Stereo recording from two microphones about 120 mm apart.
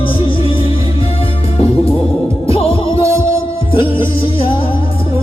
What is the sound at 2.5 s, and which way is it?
Heart murmur, 55° left (ahead or behind).